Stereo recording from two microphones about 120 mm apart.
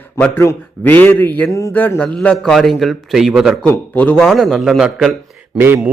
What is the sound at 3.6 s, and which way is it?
Speech, 15° left (ahead or behind).